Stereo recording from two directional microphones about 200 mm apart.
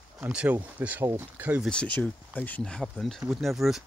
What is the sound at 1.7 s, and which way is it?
Speech, 5° left (ahead or behind).